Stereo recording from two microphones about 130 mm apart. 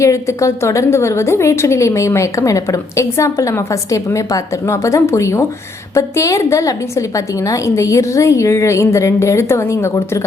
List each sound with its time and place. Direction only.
0.0 s a woman's voice: 25° left (ahead or behind)